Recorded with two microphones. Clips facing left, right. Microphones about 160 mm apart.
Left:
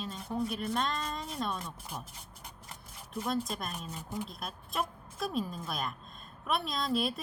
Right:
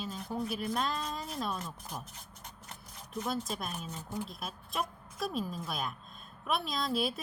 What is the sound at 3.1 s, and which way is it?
Speech, centre (ahead or behind).